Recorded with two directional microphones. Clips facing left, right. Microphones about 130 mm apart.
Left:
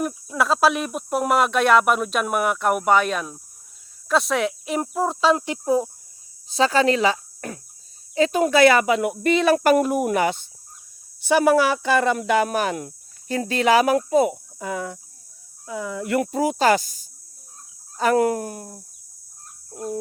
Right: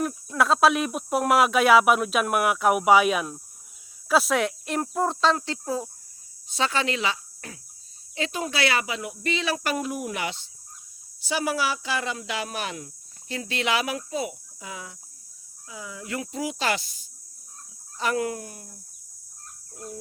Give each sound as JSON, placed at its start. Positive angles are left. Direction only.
{"t": 0.0, "sound": "speech", "side_deg": 5}
{"t": 4.8, "sound": "cricket", "side_deg": 5}
{"t": 5.4, "sound": "speech", "side_deg": 20}
{"t": 6.5, "sound": "speech", "side_deg": 35}